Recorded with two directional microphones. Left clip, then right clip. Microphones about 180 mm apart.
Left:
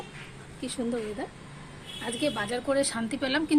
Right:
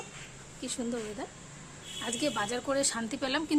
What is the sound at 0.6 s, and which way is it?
Speech, centre (ahead or behind).